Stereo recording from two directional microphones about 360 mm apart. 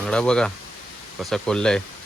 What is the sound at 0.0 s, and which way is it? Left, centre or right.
Speech, centre.